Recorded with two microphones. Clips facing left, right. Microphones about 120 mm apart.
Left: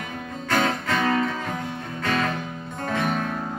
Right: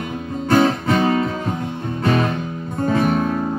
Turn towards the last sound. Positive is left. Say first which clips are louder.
# right 7 dB
turn(degrees=-40)  # may be behind; listen again after turning